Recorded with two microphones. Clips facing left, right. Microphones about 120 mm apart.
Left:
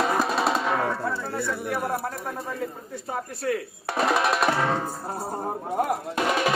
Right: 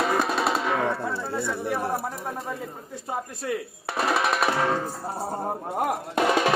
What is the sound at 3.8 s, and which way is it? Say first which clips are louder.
Speech: left 2 dB; centre (ahead or behind).